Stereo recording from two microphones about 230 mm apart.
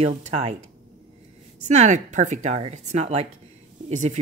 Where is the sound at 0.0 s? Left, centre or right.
Right.